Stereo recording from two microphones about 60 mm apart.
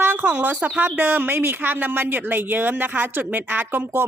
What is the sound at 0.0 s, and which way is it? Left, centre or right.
Speech, right.